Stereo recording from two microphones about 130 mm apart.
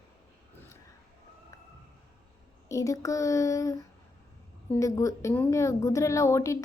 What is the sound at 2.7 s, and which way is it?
Speech, 25° left (ahead or behind).